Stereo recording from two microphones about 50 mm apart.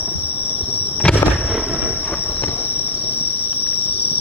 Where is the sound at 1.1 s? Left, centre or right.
Centre.